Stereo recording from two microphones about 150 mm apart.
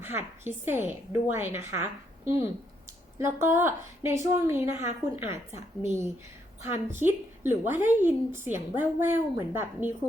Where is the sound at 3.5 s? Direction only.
15° right (ahead or behind).